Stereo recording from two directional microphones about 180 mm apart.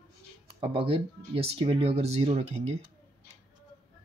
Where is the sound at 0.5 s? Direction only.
30° right (ahead or behind).